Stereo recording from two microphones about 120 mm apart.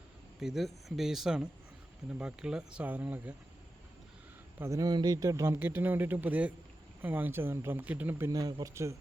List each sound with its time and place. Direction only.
0.3 s speech: centre (ahead or behind)
4.6 s a man's voice: 30° right (ahead or behind)
8.3 s a man's voice: 30° right (ahead or behind)